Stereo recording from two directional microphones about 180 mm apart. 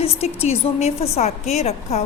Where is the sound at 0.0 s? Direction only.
35° left (ahead or behind).